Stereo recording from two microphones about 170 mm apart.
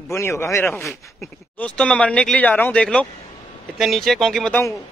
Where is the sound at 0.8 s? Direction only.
5° left (ahead or behind).